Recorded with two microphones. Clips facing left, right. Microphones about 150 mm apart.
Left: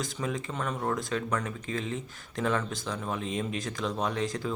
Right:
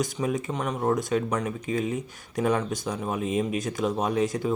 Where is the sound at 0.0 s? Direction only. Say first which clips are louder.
Right 6 dB; 20° right (ahead or behind).